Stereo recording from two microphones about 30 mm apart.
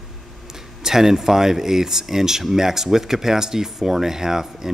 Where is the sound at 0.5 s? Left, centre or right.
Centre.